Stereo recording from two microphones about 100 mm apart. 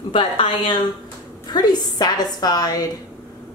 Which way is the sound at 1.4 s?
45° left (ahead or behind).